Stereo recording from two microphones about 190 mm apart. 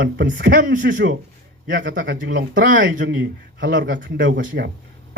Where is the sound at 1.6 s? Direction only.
70° right (ahead or behind).